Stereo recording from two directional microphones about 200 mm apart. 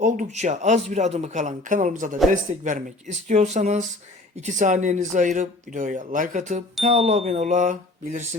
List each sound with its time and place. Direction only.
0.0 s speech: 35° right (ahead or behind)